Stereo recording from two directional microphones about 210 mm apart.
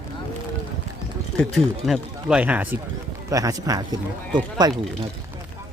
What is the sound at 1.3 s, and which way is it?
Speech, centre (ahead or behind).